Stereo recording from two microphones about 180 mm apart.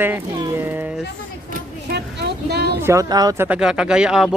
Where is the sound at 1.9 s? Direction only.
65° right (ahead or behind).